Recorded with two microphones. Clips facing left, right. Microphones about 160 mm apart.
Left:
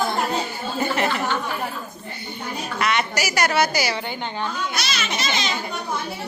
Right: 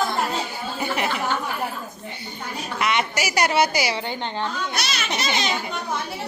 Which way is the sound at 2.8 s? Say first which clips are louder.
Even; 20° right (ahead or behind).